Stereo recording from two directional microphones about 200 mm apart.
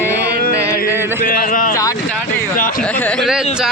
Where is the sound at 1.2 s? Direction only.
45° left (ahead or behind).